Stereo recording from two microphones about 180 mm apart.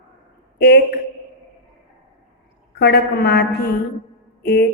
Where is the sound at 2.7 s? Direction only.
60° left (ahead or behind).